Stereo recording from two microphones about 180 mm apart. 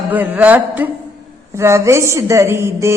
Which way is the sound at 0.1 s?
10° right (ahead or behind).